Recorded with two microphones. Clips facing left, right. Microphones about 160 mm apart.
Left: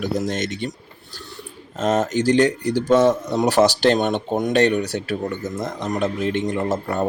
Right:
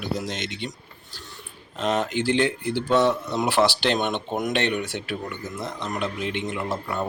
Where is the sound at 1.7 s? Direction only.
45° left (ahead or behind).